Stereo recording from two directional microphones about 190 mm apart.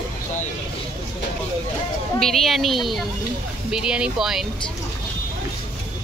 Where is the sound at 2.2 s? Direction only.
Centre (ahead or behind).